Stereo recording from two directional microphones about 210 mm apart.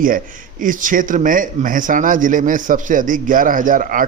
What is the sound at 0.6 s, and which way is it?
Speech, 40° right (ahead or behind).